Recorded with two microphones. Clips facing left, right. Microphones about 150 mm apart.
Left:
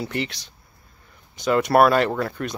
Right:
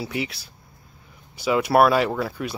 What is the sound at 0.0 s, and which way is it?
Speech, 5° right (ahead or behind).